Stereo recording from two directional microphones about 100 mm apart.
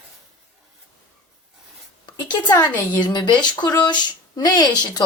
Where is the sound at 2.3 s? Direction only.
40° left (ahead or behind).